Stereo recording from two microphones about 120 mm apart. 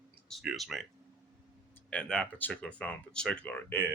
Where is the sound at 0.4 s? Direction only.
Centre (ahead or behind).